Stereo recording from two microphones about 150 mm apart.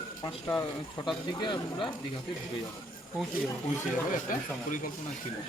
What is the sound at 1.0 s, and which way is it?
Speech, 30° left (ahead or behind).